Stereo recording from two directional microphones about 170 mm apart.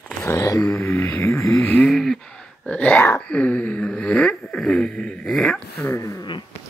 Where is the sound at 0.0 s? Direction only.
15° left (ahead or behind).